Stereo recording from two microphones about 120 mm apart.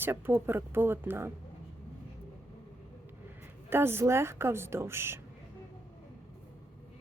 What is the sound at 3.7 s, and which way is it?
A woman's voice, 20° right (ahead or behind).